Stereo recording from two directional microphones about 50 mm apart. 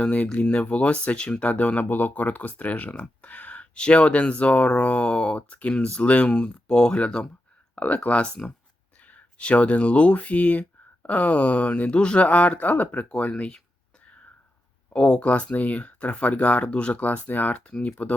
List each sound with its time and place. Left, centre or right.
0.0 s speech: left
14.9 s speech: left
17.5 s speech: left